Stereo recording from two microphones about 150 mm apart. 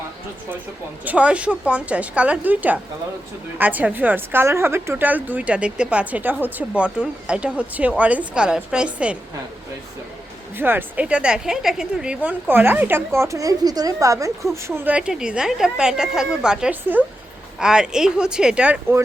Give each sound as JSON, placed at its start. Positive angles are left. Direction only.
{"t": 1.0, "sound": "a woman's voice", "side_deg": -10}
{"t": 10.6, "sound": "a woman's voice", "side_deg": -15}